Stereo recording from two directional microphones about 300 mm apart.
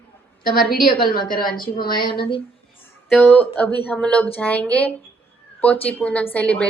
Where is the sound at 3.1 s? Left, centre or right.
Centre.